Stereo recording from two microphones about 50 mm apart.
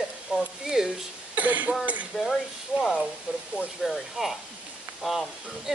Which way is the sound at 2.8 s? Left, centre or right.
Centre.